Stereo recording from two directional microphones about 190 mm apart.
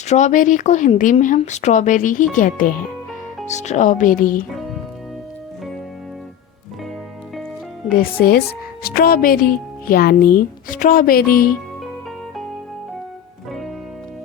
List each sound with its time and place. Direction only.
0.1 s a woman's voice: 40° left (ahead or behind)
7.9 s a woman's voice: 50° left (ahead or behind)